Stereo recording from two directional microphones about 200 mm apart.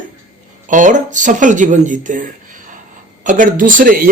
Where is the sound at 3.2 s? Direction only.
40° right (ahead or behind).